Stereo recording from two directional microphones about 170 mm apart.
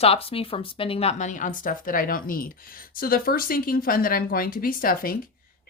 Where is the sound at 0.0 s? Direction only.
35° left (ahead or behind).